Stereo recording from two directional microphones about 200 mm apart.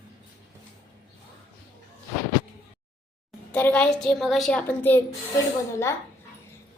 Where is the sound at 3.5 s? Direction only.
5° left (ahead or behind).